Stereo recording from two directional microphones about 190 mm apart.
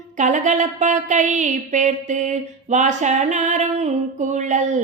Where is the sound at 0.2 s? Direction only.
40° right (ahead or behind).